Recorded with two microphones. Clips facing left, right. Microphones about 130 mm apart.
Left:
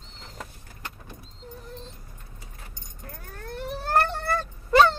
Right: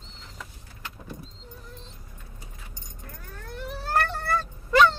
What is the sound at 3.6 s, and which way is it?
Vehicle, 50° left (ahead or behind).